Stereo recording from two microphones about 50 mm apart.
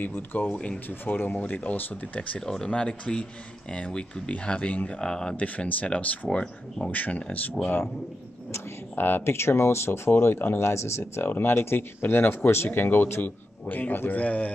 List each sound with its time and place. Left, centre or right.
0.0 s a man's voice: left
2.4 s speech: centre; by 5.0 s left
5.0 s speech: centre
5.3 s speech: left
6.9 s speech: left
8.9 s a man's voice: left